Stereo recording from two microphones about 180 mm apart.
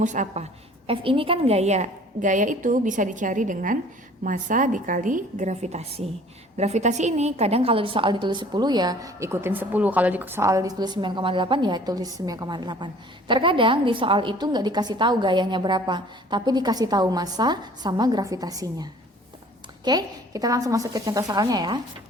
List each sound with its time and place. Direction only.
0.0 s a woman's voice: 45° right (ahead or behind)
0.9 s a woman's voice: 30° right (ahead or behind)